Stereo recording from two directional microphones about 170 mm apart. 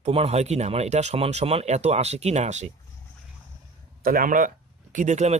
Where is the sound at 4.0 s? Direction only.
55° right (ahead or behind).